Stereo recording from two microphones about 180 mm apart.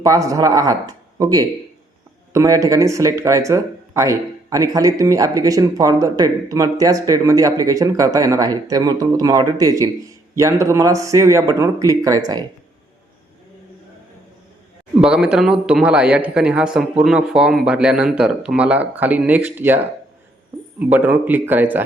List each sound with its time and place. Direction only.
0.0 s speech: 20° right (ahead or behind)
15.0 s a man's voice: 5° right (ahead or behind)